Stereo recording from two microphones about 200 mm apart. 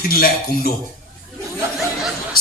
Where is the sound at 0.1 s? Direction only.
45° left (ahead or behind).